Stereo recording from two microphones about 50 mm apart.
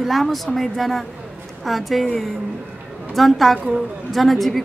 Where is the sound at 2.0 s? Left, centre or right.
Centre.